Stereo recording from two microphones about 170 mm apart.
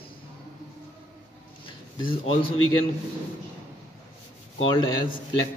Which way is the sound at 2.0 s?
35° left (ahead or behind).